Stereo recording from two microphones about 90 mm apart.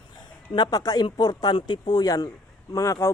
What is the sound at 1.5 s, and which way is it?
A woman's voice, 60° left (ahead or behind).